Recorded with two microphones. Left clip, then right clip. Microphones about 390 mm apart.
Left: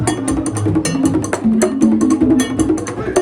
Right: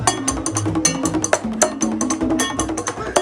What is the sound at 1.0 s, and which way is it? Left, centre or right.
Music, centre.